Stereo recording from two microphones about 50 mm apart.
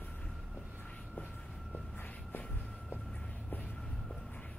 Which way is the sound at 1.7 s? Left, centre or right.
Left.